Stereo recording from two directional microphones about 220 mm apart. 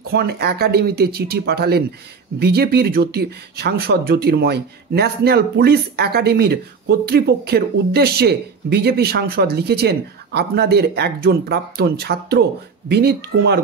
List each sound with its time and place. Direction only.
0.0 s speech: 45° right (ahead or behind)